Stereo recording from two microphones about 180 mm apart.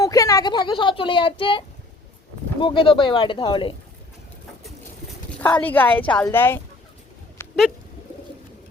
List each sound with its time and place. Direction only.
0.0 s a woman's voice: 20° left (ahead or behind)
5.4 s a woman's voice: 10° left (ahead or behind)
7.4 s a sound: 15° left (ahead or behind)